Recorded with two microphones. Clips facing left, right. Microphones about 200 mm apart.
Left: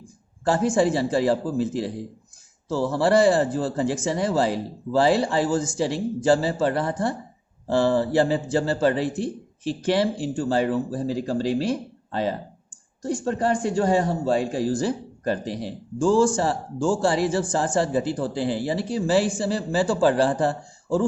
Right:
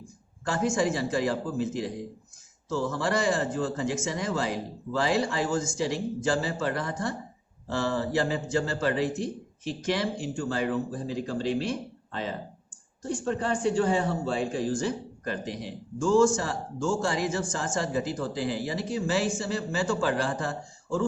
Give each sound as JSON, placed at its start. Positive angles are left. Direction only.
{"t": 0.4, "sound": "a man's voice", "side_deg": 30}